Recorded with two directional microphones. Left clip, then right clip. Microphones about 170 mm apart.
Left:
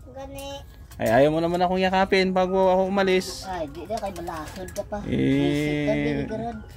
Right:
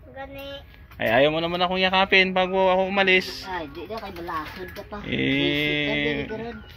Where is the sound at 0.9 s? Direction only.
35° left (ahead or behind).